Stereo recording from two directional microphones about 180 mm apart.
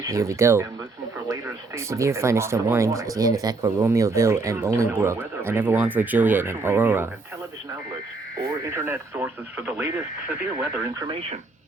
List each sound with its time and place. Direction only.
0.0 s speech: 20° right (ahead or behind)
8.7 s speech: 10° right (ahead or behind)
11.0 s speech: 30° right (ahead or behind)